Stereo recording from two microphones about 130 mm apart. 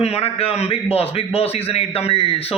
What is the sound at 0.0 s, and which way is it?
A man's voice, 50° left (ahead or behind).